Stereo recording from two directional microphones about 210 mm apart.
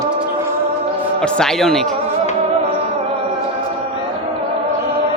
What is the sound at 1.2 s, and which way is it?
Speech, 5° left (ahead or behind).